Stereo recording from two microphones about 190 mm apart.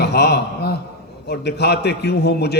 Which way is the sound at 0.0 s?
60° left (ahead or behind).